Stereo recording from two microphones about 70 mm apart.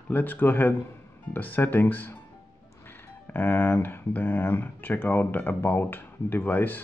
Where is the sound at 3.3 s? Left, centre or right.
Left.